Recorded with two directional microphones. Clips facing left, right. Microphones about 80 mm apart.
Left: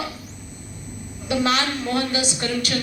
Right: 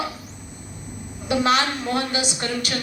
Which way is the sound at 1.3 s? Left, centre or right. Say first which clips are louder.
Right 2 dB; centre.